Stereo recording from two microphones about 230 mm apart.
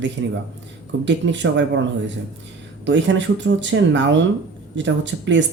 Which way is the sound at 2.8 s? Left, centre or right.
Right.